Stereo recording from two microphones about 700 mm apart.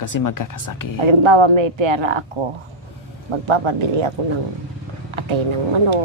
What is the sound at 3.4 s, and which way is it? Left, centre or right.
Speech, right.